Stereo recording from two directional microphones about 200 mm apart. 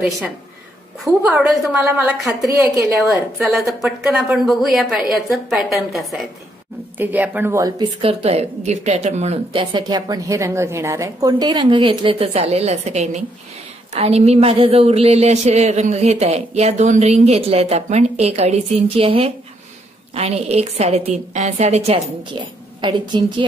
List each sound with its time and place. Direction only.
1.0 s a woman's voice: 15° right (ahead or behind)
1.4 s a woman's voice: centre (ahead or behind)
3.0 s a woman's voice: centre (ahead or behind); by 23.2 s 25° right (ahead or behind)